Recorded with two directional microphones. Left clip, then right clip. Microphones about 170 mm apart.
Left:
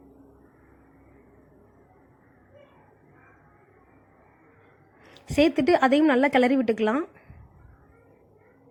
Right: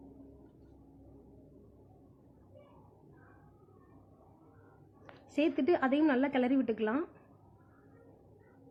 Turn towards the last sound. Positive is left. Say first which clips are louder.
# left 9 dB
turn(degrees=30)  # may be behind; listen again after turning